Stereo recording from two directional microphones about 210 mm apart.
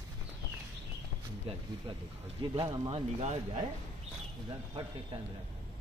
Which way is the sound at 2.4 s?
20° right (ahead or behind).